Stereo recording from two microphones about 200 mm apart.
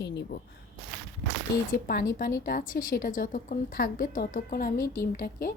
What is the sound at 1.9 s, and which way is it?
A woman's voice, 50° left (ahead or behind).